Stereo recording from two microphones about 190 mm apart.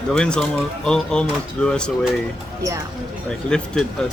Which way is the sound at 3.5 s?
5° left (ahead or behind).